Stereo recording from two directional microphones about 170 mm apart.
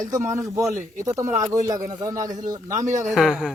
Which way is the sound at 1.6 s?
20° right (ahead or behind).